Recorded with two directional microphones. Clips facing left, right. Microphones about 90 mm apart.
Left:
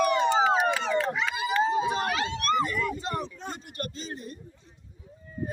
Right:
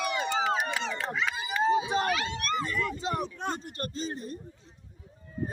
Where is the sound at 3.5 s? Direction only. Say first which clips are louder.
Right 2 dB; 35° right (ahead or behind).